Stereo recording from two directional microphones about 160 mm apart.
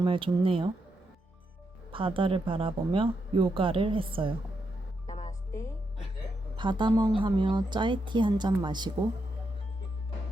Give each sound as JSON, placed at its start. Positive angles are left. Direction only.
{"t": 0.0, "sound": "speech", "side_deg": -35}
{"t": 1.9, "sound": "speech", "side_deg": -35}
{"t": 5.0, "sound": "music", "side_deg": 45}
{"t": 5.5, "sound": "speech", "side_deg": 20}
{"t": 6.6, "sound": "speech", "side_deg": -30}